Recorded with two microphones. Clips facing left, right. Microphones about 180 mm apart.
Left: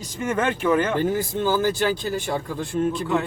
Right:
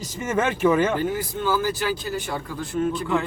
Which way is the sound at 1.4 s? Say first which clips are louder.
Left 2 dB; 30° left (ahead or behind).